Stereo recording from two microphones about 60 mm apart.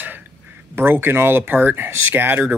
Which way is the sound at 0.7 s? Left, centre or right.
Right.